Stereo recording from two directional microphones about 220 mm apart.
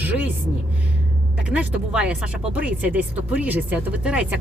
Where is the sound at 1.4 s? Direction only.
5° right (ahead or behind).